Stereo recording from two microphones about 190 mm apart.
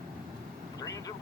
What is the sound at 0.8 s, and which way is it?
Vehicle, 20° left (ahead or behind).